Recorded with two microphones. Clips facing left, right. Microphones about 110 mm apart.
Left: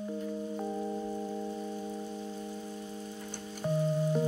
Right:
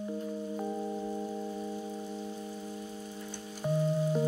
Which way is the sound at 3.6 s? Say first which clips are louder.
Even; 10° right (ahead or behind).